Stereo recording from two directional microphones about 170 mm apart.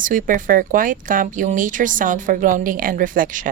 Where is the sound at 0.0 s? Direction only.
55° right (ahead or behind).